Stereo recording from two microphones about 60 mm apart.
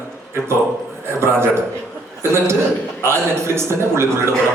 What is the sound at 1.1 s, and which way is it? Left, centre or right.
A man's voice, right.